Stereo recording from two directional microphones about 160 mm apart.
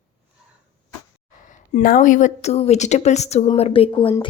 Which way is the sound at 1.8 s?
60° left (ahead or behind).